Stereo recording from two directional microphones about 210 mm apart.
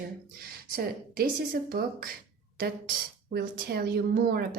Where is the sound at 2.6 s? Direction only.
45° right (ahead or behind).